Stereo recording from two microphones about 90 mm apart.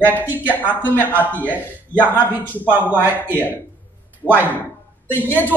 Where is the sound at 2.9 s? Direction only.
20° right (ahead or behind).